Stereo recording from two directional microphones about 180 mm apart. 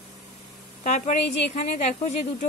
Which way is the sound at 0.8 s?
45° left (ahead or behind).